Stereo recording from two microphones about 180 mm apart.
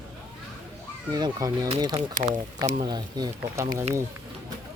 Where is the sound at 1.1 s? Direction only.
20° right (ahead or behind).